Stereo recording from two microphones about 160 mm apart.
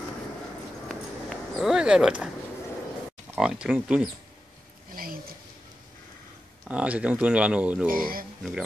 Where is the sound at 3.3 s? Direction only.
5° right (ahead or behind).